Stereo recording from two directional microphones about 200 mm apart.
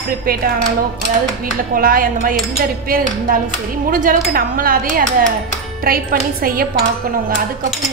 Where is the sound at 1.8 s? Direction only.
45° right (ahead or behind).